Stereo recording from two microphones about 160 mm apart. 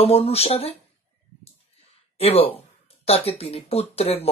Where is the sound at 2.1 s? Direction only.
40° left (ahead or behind).